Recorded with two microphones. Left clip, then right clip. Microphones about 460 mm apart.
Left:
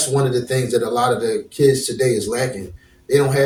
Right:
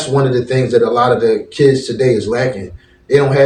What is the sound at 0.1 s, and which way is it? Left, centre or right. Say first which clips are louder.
Speech: right 7 dB; left.